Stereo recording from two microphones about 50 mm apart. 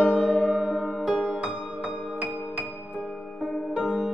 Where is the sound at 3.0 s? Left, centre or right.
Centre.